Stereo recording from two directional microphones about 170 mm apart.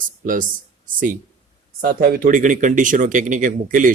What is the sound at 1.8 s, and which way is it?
Speech, 60° right (ahead or behind).